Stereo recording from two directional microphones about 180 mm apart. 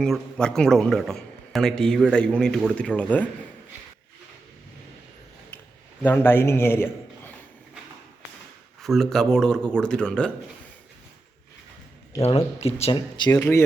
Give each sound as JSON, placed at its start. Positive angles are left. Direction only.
{"t": 0.0, "sound": "speech", "side_deg": 5}
{"t": 6.0, "sound": "a man's voice", "side_deg": 10}
{"t": 8.8, "sound": "speech", "side_deg": 0}
{"t": 12.8, "sound": "speech", "side_deg": 25}